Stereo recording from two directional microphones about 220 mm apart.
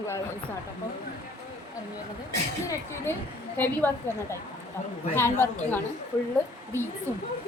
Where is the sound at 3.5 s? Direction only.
10° left (ahead or behind).